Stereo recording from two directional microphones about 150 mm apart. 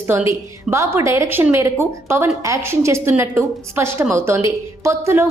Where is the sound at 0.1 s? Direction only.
15° right (ahead or behind).